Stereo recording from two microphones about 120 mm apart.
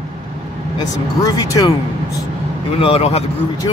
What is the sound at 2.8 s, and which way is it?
Speech, 55° left (ahead or behind).